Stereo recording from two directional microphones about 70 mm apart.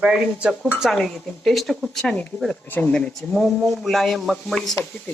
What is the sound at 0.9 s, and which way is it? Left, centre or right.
A woman's voice, centre.